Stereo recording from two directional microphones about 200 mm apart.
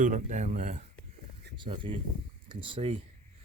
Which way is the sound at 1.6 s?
25° right (ahead or behind).